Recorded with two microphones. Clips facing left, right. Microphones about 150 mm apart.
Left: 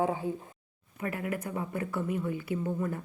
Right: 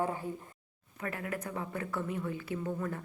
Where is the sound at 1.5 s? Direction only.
25° left (ahead or behind).